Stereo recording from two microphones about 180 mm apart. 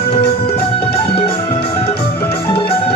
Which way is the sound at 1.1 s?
30° left (ahead or behind).